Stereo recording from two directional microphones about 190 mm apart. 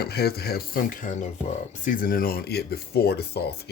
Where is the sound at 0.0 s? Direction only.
55° left (ahead or behind).